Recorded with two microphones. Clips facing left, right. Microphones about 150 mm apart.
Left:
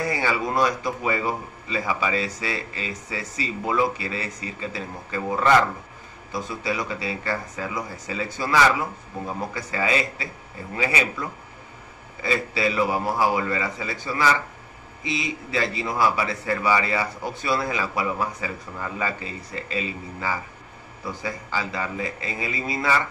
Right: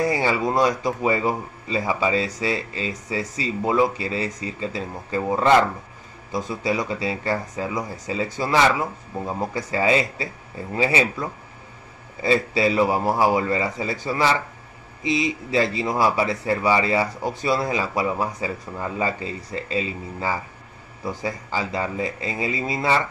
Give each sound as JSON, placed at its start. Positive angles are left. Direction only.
{"t": 0.1, "sound": "speech", "side_deg": -25}
{"t": 15.5, "sound": "speech", "side_deg": -25}